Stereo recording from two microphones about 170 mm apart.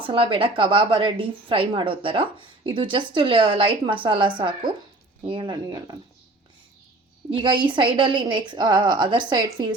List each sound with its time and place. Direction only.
0.0 s a woman's voice: 30° right (ahead or behind)
7.3 s a woman's voice: 30° right (ahead or behind)